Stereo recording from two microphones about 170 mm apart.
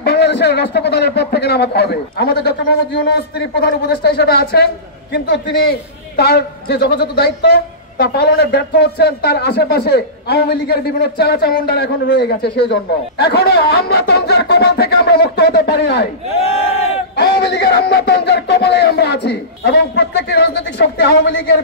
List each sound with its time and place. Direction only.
0.0 s a man's voice: 75° left (ahead or behind)
17.1 s a man's voice: 75° left (ahead or behind)